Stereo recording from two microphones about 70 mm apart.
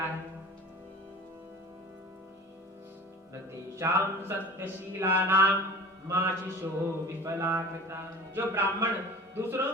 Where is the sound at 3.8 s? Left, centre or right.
Right.